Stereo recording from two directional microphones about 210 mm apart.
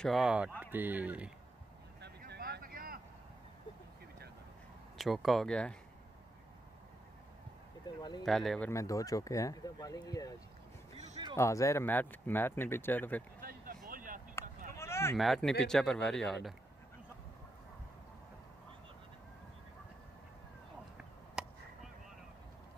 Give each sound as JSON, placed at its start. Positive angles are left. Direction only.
{"t": 0.0, "sound": "speech", "side_deg": 0}
{"t": 2.0, "sound": "vehicle", "side_deg": -50}
{"t": 4.9, "sound": "speech", "side_deg": 0}
{"t": 8.0, "sound": "speech", "side_deg": 20}
{"t": 8.3, "sound": "speech", "side_deg": 0}
{"t": 11.3, "sound": "speech", "side_deg": 15}
{"t": 13.4, "sound": "a sound", "side_deg": -45}
{"t": 14.8, "sound": "a sound", "side_deg": 10}
{"t": 15.1, "sound": "speech", "side_deg": 0}
{"t": 21.4, "sound": "whip", "side_deg": -5}